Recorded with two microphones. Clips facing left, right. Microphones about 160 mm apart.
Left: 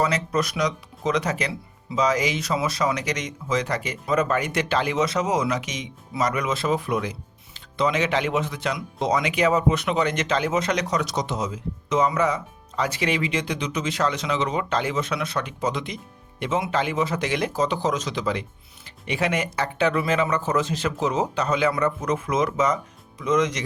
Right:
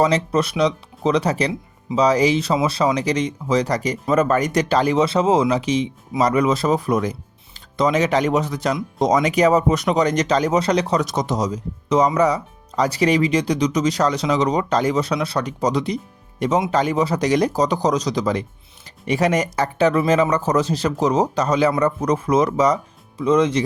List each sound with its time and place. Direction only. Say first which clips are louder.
0.0 s speech: right 5 dB; 30° right (ahead or behind)
11.0 s speech: right 5 dB; 50° right (ahead or behind); by 23.6 s 30° right (ahead or behind)